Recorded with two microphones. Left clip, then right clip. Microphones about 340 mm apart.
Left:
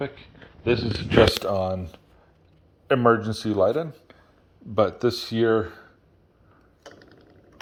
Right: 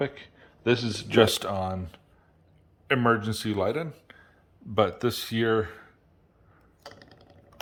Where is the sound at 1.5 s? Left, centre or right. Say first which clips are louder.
Left 5 dB; right.